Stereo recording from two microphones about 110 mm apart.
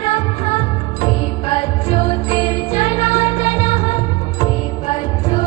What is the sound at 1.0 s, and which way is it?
Music, 60° left (ahead or behind).